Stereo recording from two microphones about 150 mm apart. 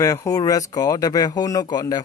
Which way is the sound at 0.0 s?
20° left (ahead or behind).